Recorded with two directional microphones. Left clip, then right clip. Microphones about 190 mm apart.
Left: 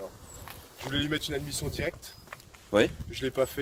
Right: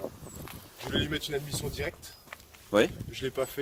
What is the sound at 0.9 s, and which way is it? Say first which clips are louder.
Speech: left 1 dB; 50° left (ahead or behind).